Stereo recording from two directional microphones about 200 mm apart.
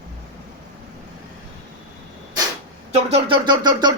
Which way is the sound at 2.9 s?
30° right (ahead or behind).